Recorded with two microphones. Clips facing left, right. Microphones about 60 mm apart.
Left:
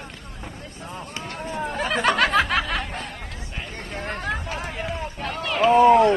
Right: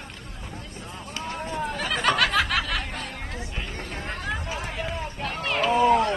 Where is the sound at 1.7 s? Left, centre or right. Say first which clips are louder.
Left 3 dB; left.